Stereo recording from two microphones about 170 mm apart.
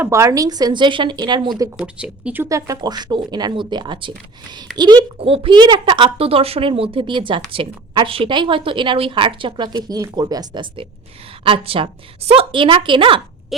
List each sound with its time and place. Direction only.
0.0 s a woman's voice: 15° right (ahead or behind)
1.8 s a woman's voice: 5° right (ahead or behind); by 4.1 s 30° right (ahead or behind)
4.7 s a child's voice: 5° right (ahead or behind)
5.2 s a woman's voice: 30° right (ahead or behind)
13.5 s a child's voice: centre (ahead or behind)